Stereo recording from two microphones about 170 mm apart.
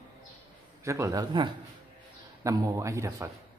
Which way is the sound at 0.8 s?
15° right (ahead or behind).